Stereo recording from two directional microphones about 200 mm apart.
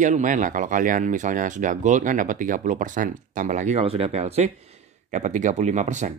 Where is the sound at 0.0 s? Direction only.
40° right (ahead or behind).